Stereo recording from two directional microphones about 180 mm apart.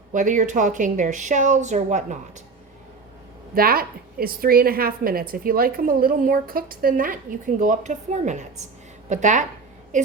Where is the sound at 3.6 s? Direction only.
55° right (ahead or behind).